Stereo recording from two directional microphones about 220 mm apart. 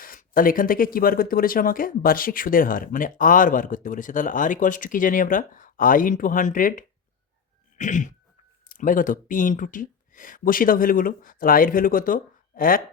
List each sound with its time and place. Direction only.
0.0 s speech: 40° left (ahead or behind)